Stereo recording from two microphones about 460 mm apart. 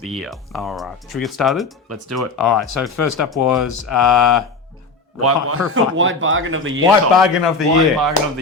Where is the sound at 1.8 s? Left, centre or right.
Right.